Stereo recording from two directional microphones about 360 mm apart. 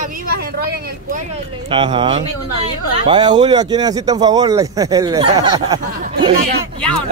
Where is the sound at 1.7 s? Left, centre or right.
Centre.